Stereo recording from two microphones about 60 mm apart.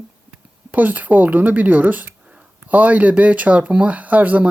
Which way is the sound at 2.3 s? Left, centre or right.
Right.